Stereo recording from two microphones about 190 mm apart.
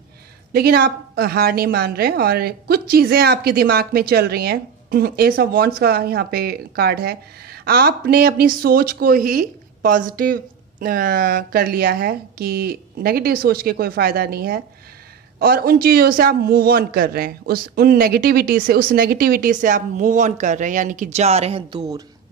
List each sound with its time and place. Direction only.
0.5 s speech: 55° right (ahead or behind); by 21.6 s 35° right (ahead or behind)
21.7 s speech: 20° right (ahead or behind)